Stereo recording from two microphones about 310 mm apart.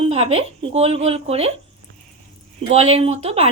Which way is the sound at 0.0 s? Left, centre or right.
Centre.